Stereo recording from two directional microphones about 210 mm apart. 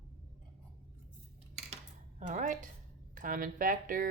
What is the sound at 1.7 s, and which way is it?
Dishes, 35° right (ahead or behind).